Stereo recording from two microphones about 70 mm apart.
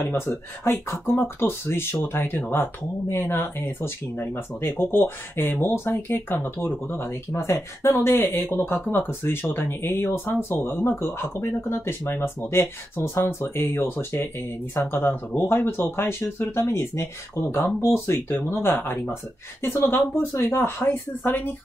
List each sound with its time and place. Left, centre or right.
0.3 s speech: left